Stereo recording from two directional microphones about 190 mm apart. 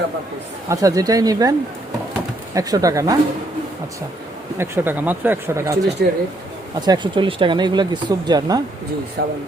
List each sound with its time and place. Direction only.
0.7 s speech: 15° right (ahead or behind)
2.6 s speech: 20° right (ahead or behind)
4.5 s speech: 10° right (ahead or behind)
6.0 s speech: 55° right (ahead or behind)
6.7 s speech: 20° right (ahead or behind)
9.2 s speech: 60° right (ahead or behind)